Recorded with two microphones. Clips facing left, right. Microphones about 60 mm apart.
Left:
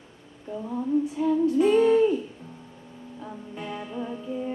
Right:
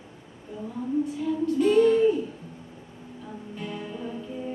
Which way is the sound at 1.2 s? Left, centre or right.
Centre.